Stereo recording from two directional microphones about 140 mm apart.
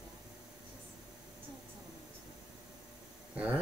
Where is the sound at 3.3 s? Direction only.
10° right (ahead or behind).